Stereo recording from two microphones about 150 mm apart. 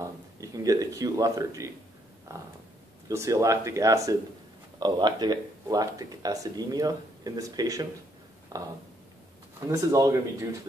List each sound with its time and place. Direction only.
0.0 s speech: 25° right (ahead or behind)